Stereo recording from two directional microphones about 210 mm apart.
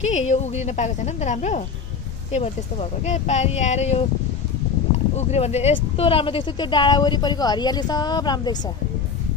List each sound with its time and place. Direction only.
0.0 s speech: 35° left (ahead or behind)